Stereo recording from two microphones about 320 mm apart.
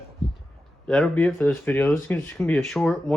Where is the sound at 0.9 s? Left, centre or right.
Centre.